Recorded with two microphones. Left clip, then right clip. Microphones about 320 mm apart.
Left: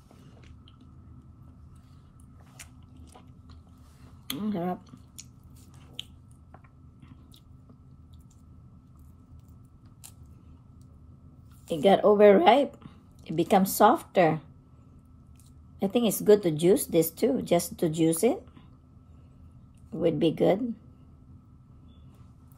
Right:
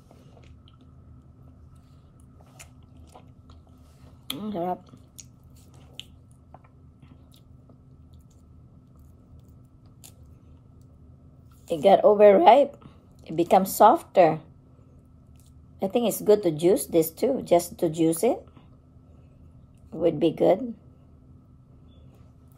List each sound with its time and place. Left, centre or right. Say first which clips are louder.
2.6 s biting: left 1 dB; centre
4.4 s speech: right 3 dB; centre
11.9 s a woman's voice: right 3 dB; centre
15.8 s speech: right 2 dB; centre
19.9 s speech: right 2 dB; centre